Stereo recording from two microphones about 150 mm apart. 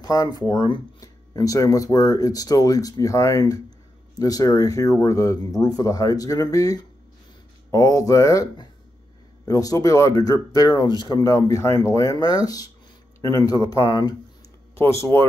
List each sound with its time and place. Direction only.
0.0 s speech: 25° left (ahead or behind)
14.8 s speech: 15° left (ahead or behind)